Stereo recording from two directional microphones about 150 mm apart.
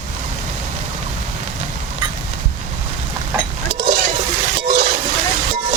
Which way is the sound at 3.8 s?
60° right (ahead or behind).